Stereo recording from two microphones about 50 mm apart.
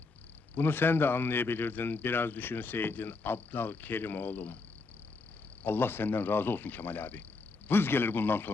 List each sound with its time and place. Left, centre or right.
0.5 s speech: left
5.6 s speech: left